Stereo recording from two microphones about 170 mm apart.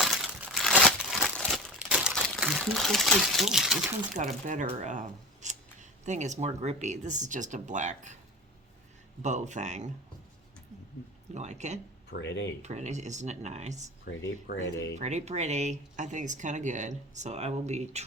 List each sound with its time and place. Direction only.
0.0 s crumpling: centre (ahead or behind)
2.1 s speech: 5° left (ahead or behind)
4.1 s speech: 50° right (ahead or behind)
9.2 s speech: 45° right (ahead or behind)
11.3 s speech: 45° right (ahead or behind)
12.1 s speech: 85° left
12.6 s speech: 40° right (ahead or behind)
14.4 s speech: 90° left
14.9 s speech: 40° right (ahead or behind)